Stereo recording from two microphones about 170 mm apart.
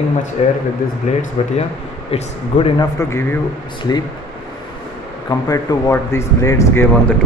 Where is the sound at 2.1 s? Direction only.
30° left (ahead or behind).